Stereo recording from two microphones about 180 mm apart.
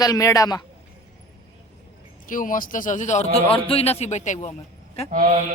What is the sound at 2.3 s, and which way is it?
Speech, 50° left (ahead or behind).